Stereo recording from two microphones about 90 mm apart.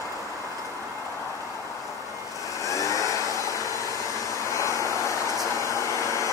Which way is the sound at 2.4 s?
35° left (ahead or behind).